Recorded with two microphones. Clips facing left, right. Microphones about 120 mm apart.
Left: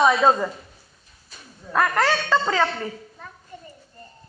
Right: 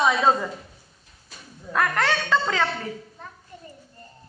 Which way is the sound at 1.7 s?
5° left (ahead or behind).